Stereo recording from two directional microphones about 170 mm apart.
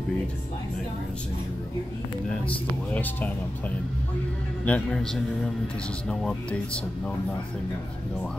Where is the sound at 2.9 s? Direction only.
10° left (ahead or behind).